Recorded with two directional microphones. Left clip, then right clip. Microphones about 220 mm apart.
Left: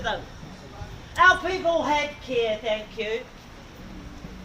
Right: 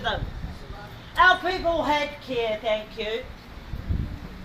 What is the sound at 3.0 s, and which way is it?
Speech, 10° left (ahead or behind).